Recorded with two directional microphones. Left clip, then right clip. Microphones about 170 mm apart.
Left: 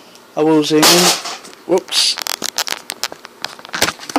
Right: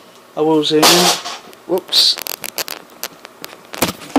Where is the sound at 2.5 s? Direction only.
90° right.